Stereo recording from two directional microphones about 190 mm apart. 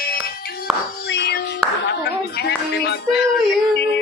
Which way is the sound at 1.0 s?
65° left (ahead or behind).